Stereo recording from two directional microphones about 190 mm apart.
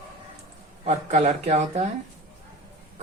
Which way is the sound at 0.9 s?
35° right (ahead or behind).